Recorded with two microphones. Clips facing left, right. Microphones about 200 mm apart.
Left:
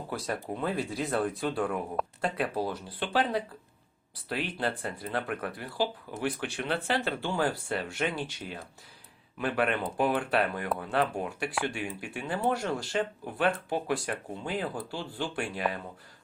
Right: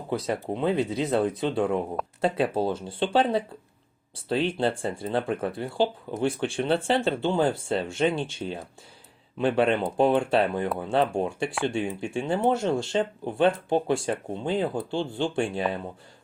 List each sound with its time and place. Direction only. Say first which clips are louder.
0.1 s speech: right 7 dB; 20° right (ahead or behind)